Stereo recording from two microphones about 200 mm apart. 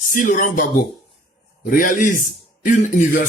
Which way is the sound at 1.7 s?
45° left (ahead or behind).